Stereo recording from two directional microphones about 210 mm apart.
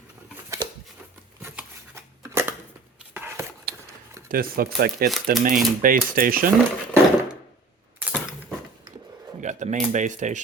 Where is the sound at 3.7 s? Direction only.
50° right (ahead or behind).